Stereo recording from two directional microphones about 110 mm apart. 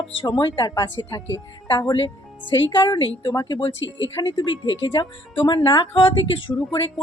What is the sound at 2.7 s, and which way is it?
Speech, 45° left (ahead or behind).